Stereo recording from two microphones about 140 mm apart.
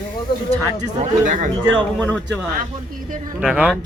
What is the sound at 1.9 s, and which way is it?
Speech, 10° left (ahead or behind).